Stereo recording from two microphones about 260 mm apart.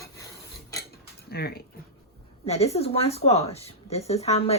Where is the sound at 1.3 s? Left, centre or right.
Left.